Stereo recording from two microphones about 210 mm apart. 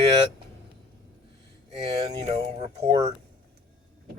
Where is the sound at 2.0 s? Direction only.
30° right (ahead or behind).